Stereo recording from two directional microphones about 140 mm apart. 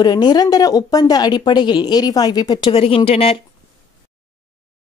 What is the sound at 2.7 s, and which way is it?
Speech, 45° left (ahead or behind).